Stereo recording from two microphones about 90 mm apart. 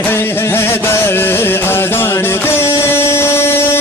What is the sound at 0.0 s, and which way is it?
Music, 25° left (ahead or behind).